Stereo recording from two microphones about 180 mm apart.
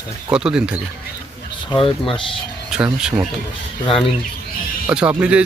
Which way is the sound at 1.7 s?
30° left (ahead or behind).